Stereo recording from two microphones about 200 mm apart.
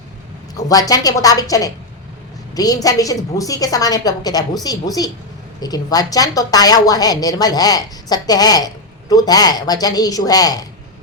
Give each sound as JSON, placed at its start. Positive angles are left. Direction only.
{"t": 0.5, "sound": "a woman's voice", "side_deg": 20}